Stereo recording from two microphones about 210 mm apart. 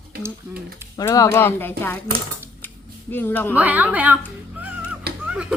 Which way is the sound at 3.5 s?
10° right (ahead or behind).